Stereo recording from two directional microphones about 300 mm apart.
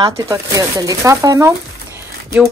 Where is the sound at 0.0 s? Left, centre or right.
Centre.